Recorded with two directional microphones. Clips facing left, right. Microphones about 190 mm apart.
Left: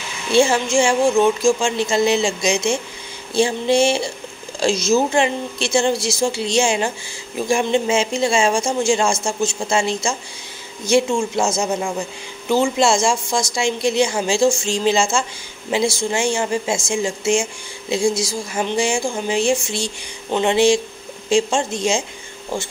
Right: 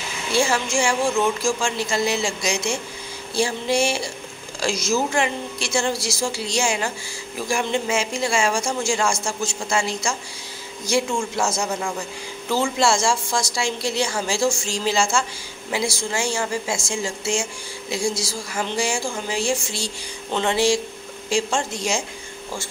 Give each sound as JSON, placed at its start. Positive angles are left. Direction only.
{"t": 0.3, "sound": "a woman's voice", "side_deg": 25}